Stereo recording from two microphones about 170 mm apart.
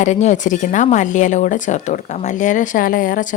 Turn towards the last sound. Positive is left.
turn(degrees=50)  # may be behind; listen again after turning